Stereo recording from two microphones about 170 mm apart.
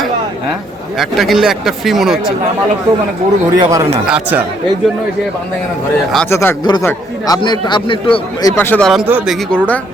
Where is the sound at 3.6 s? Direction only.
20° right (ahead or behind).